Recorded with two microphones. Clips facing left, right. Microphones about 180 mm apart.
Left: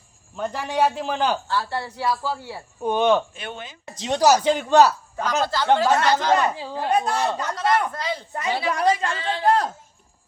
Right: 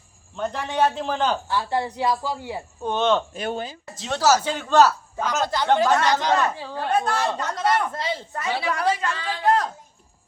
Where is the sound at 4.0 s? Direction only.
15° left (ahead or behind).